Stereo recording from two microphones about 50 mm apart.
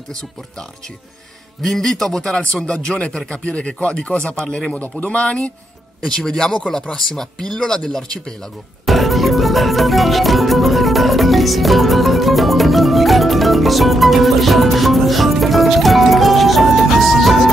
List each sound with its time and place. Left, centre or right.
1.6 s speech: centre; by 4.4 s left
4.5 s speech: centre
5.0 s speech: left
6.0 s speech: centre
8.8 s music: centre